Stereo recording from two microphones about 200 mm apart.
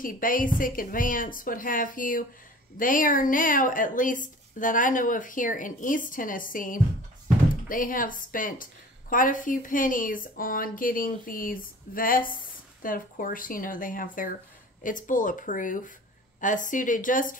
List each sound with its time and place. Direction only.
0.0 s speech: 45° left (ahead or behind)